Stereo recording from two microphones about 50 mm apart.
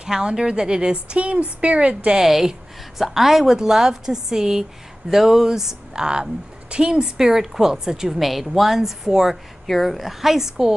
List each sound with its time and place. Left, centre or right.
0.0 s a woman's voice: centre
2.1 s a woman's voice: centre